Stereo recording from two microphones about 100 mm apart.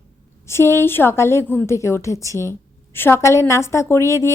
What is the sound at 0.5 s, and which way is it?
A woman's voice, 25° left (ahead or behind).